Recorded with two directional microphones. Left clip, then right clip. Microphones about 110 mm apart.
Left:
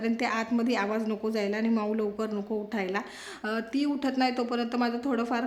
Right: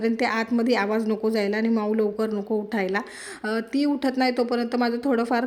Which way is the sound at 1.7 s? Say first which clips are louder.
Right 5 dB; 25° right (ahead or behind).